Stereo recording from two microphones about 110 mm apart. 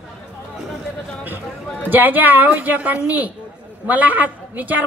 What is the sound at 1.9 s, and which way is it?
A woman's voice, 15° right (ahead or behind).